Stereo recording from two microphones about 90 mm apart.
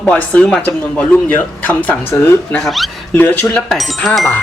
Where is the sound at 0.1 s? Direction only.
10° left (ahead or behind).